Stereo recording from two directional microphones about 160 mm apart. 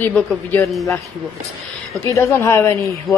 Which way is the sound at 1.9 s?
20° left (ahead or behind).